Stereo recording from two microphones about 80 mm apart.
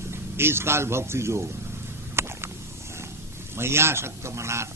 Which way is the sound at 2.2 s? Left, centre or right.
Right.